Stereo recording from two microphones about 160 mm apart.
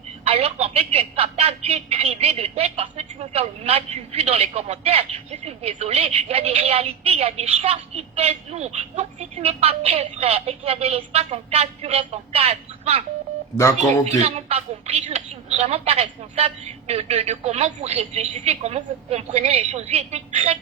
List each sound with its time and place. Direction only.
0.3 s a woman's voice: 35° right (ahead or behind)
13.6 s speech: 15° left (ahead or behind)
14.0 s a woman's voice: 40° right (ahead or behind)